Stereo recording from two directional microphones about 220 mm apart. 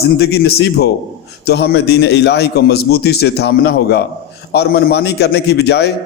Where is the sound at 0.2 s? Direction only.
45° left (ahead or behind).